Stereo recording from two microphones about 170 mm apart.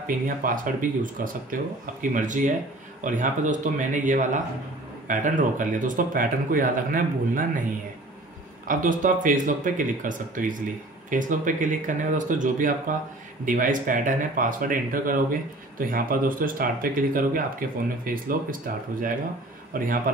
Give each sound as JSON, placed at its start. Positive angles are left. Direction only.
{"t": 0.0, "sound": "speech", "side_deg": -55}
{"t": 8.6, "sound": "speech", "side_deg": -50}